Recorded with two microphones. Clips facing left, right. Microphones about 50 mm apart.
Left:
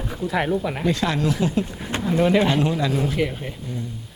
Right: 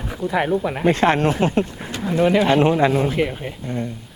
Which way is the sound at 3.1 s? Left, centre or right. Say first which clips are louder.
Right 2 dB; centre.